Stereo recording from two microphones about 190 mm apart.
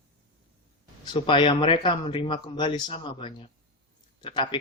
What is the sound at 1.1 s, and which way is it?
Speech, 25° left (ahead or behind).